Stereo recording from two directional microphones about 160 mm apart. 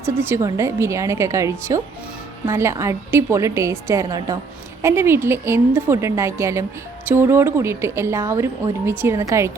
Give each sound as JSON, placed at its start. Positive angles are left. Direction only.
{"t": 0.0, "sound": "a woman's voice", "side_deg": -15}